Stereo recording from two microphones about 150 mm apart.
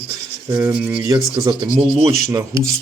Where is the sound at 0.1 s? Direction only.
20° right (ahead or behind).